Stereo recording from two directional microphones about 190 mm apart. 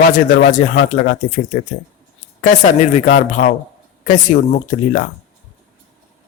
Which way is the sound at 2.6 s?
40° left (ahead or behind).